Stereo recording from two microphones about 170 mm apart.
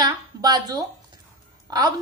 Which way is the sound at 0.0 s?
25° right (ahead or behind).